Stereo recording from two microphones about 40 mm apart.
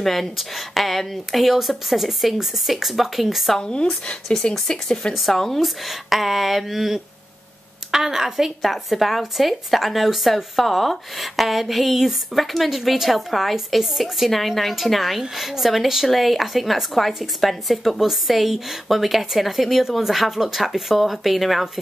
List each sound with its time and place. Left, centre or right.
0.0 s speech: centre
3.5 s speech: centre
5.6 s speech: centre